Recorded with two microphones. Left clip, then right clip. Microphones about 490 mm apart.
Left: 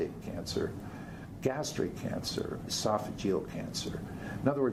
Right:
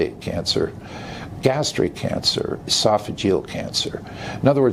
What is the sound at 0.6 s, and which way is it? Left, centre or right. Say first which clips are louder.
Speech: right 12 dB; right.